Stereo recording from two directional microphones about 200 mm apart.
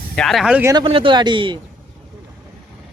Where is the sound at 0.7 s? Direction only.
25° right (ahead or behind).